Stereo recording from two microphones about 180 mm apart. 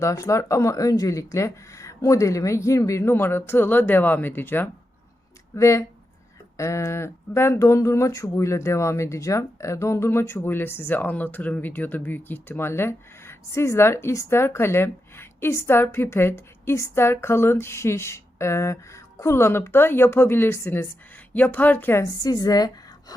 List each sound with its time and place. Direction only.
0.0 s speech: 15° left (ahead or behind)